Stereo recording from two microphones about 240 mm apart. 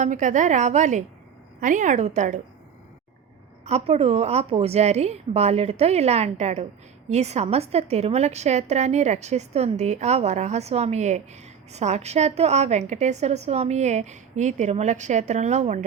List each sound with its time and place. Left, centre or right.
0.0 s a woman's voice: right
3.6 s a woman's voice: right